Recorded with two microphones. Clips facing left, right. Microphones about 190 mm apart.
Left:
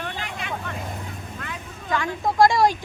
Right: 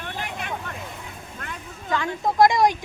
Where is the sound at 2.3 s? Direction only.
20° right (ahead or behind).